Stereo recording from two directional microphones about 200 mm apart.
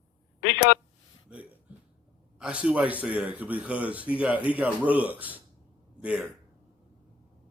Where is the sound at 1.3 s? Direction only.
5° right (ahead or behind).